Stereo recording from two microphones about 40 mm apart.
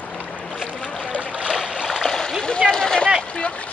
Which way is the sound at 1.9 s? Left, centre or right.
Centre.